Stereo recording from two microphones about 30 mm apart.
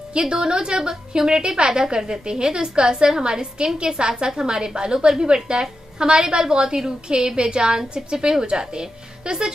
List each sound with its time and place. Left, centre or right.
0.1 s a woman's voice: right